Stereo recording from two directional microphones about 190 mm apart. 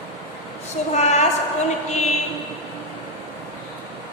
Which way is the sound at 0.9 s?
35° left (ahead or behind).